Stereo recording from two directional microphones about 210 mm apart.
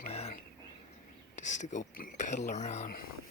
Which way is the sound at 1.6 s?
35° left (ahead or behind).